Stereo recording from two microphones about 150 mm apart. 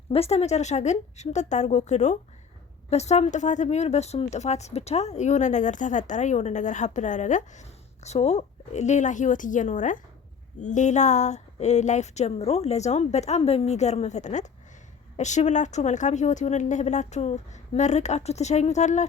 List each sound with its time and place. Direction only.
0.1 s a woman's voice: 45° left (ahead or behind)